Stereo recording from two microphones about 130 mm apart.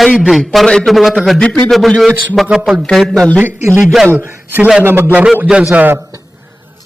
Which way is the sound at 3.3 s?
15° right (ahead or behind).